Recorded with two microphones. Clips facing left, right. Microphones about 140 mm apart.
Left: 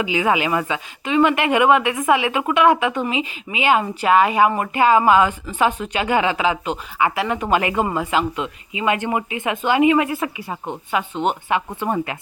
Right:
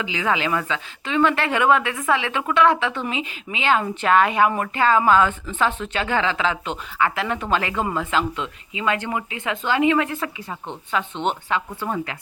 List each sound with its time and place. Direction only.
0.0 s speech: 15° left (ahead or behind)
11.4 s speech: 15° left (ahead or behind)